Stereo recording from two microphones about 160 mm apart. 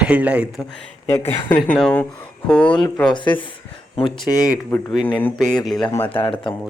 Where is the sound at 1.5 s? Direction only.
10° left (ahead or behind).